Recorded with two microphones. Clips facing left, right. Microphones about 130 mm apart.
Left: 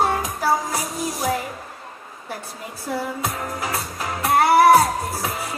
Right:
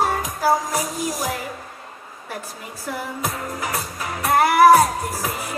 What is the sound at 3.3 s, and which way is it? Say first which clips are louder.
Music: even; 25° left (ahead or behind).